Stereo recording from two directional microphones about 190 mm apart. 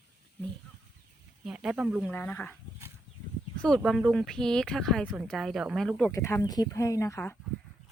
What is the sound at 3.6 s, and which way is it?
Speech, centre (ahead or behind).